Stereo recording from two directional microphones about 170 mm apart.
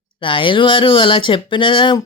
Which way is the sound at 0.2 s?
30° left (ahead or behind).